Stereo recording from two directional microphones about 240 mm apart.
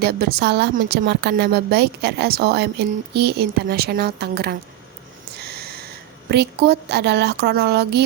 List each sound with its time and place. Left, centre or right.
0.0 s a woman's voice: right
5.4 s a sound: right
6.2 s a woman's voice: right